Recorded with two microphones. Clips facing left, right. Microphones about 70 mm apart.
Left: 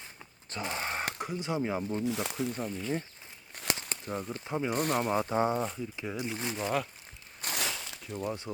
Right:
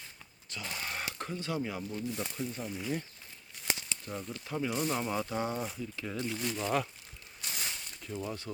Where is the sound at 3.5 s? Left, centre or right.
Left.